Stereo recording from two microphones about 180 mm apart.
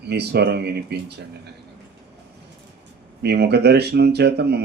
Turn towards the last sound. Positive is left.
turn(degrees=-65)  # may be behind; listen again after turning